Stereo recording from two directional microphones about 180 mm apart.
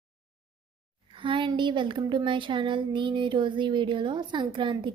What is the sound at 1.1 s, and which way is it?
A woman's voice, 30° right (ahead or behind).